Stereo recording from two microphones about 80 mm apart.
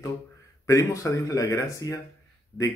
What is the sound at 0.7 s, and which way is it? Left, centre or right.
A man's voice, left.